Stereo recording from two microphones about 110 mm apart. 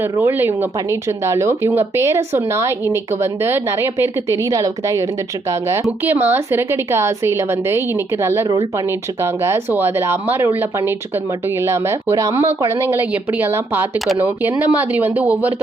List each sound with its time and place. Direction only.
0.0 s speech: 20° right (ahead or behind)